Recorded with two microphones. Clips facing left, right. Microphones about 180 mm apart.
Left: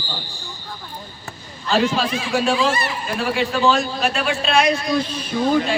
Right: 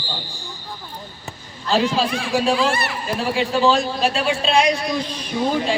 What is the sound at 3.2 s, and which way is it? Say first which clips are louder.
A man's voice: right 1 dB; 30° right (ahead or behind).